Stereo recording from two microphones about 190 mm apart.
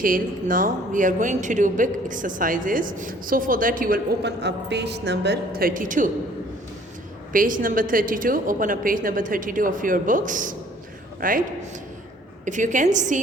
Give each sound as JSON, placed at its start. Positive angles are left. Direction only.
{"t": 0.0, "sound": "speech", "side_deg": -45}
{"t": 7.3, "sound": "speech", "side_deg": -45}
{"t": 12.5, "sound": "a woman's voice", "side_deg": -40}